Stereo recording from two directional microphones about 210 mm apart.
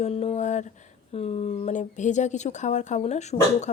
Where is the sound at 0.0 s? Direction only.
30° left (ahead or behind).